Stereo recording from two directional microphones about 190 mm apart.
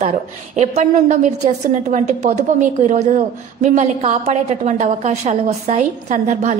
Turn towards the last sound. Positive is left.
turn(degrees=-40)  # may be behind; listen again after turning